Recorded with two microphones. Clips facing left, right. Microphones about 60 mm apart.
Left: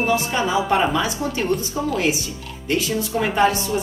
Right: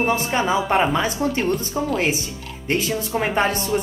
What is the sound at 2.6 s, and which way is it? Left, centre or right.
Speech, right.